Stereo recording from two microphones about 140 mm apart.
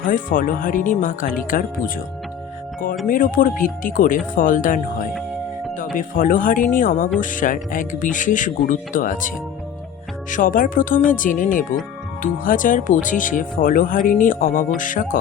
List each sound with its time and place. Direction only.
0.0 s speech: 75° left (ahead or behind)
3.1 s speech: 75° left (ahead or behind)
14.8 s speech: 70° left (ahead or behind)